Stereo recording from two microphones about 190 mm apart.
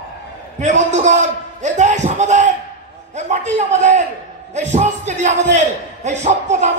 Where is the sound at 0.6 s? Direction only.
40° right (ahead or behind).